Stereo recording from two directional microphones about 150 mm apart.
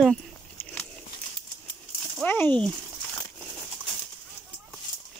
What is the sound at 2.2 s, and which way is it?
Speech, 10° left (ahead or behind).